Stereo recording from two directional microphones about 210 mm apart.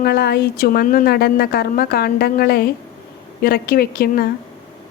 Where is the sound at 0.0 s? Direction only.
50° left (ahead or behind).